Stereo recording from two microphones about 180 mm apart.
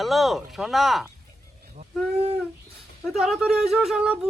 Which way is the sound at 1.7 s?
35° right (ahead or behind).